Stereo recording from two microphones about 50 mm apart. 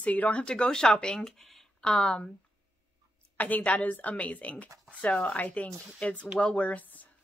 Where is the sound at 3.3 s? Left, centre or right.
Left.